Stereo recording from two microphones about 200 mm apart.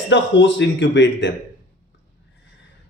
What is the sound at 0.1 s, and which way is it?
Speech, 65° left (ahead or behind).